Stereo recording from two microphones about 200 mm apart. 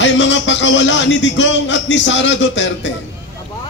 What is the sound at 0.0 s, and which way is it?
A man's voice, 65° left (ahead or behind).